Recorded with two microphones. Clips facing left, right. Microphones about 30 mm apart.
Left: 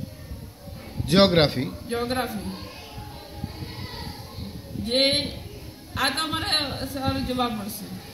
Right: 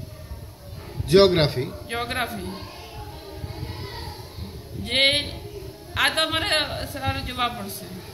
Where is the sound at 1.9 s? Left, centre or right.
Right.